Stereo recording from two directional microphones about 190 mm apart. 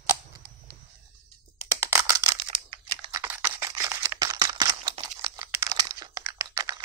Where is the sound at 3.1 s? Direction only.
10° right (ahead or behind).